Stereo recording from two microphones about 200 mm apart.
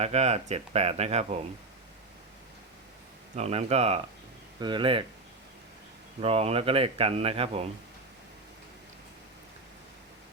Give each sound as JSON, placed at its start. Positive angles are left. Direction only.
{"t": 0.0, "sound": "speech", "side_deg": -30}
{"t": 3.3, "sound": "speech", "side_deg": -30}
{"t": 6.2, "sound": "speech", "side_deg": -30}